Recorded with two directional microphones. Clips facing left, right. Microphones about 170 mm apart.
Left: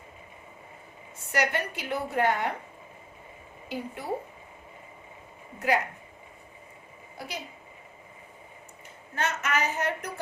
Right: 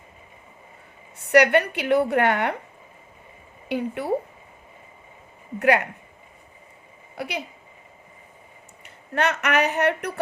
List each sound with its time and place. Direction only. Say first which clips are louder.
1.2 s a woman's voice: right 11 dB; 70° right (ahead or behind)
3.7 s a woman's voice: right 9 dB; 70° right (ahead or behind)
5.5 s a woman's voice: right 6 dB; 70° right (ahead or behind)
7.2 s a woman's voice: right 8 dB; 65° right (ahead or behind)
8.8 s speech: right 7 dB; 70° right (ahead or behind)